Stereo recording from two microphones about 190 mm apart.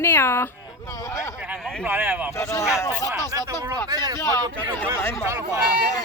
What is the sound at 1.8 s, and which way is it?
Speech, 10° right (ahead or behind).